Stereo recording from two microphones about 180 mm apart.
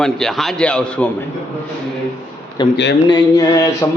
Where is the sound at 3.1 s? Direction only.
20° left (ahead or behind).